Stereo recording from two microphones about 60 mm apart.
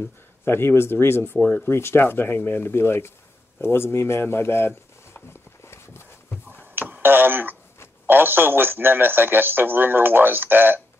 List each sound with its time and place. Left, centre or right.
0.5 s speech: left
6.6 s a sound: right
8.1 s a man's voice: right